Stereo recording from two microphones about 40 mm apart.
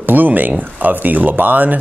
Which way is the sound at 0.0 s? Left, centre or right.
Right.